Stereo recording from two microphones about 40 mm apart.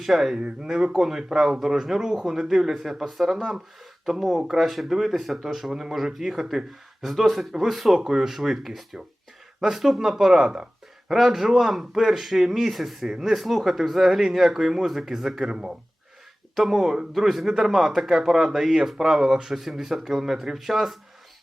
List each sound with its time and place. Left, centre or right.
0.0 s speech: centre
0.3 s speech: right
0.9 s speech: centre
11.1 s speech: centre